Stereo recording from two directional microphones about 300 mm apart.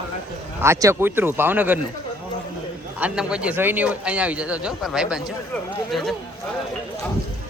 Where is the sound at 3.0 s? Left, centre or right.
Centre.